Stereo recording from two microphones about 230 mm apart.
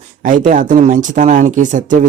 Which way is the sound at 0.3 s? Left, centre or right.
Right.